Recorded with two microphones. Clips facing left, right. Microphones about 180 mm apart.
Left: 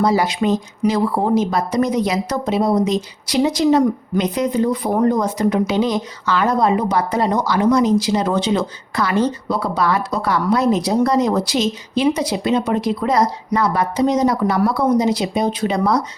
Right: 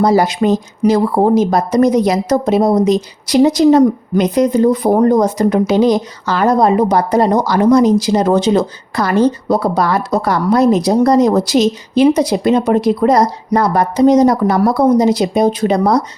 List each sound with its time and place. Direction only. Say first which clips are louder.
0.0 s speech: right 5 dB; 40° right (ahead or behind)